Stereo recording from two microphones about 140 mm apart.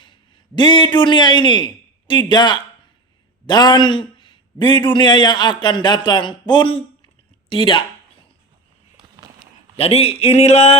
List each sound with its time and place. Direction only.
0.0 s a man's voice: 35° left (ahead or behind)
9.7 s speech: 45° left (ahead or behind)